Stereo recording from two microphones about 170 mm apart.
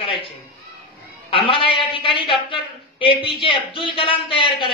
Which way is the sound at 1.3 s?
30° left (ahead or behind).